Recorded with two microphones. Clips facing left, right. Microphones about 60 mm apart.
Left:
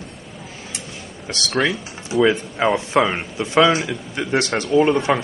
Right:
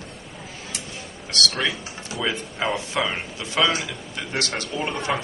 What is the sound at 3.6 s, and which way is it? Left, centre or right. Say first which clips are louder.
A man's voice: left 6 dB; centre.